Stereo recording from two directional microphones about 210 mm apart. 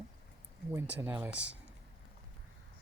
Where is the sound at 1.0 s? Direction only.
5° right (ahead or behind).